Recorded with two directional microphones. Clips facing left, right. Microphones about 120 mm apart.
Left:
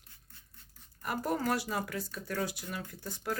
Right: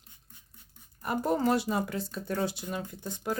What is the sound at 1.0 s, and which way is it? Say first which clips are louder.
Speech: right 5 dB; 25° right (ahead or behind).